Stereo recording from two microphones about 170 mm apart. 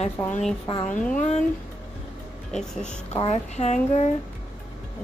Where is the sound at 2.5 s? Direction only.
5° left (ahead or behind).